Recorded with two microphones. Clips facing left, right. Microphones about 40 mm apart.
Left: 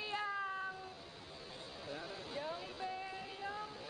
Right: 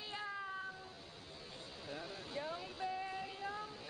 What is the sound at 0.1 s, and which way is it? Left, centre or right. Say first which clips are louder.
Meow: left 3 dB; centre.